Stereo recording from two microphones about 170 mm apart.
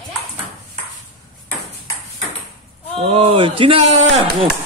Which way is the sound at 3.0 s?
35° right (ahead or behind).